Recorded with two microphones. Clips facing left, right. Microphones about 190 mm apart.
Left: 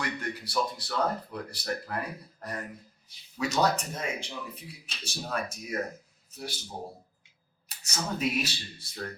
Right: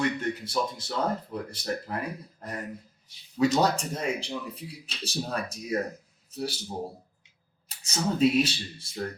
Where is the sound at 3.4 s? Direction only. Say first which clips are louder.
Right 4 dB; 30° right (ahead or behind).